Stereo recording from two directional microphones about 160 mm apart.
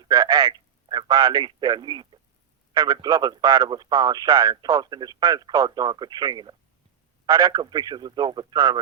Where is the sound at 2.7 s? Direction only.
25° right (ahead or behind).